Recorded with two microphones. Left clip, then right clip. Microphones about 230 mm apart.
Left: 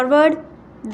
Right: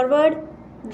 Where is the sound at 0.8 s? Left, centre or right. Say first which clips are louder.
Left 1 dB; left.